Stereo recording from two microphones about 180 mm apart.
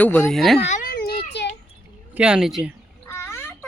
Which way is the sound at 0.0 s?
10° left (ahead or behind).